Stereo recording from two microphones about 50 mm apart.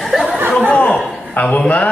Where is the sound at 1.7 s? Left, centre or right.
Left.